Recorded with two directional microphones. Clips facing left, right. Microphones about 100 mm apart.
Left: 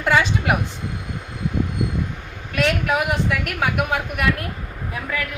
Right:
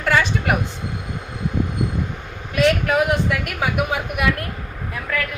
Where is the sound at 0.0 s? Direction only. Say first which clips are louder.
Even; 15° left (ahead or behind).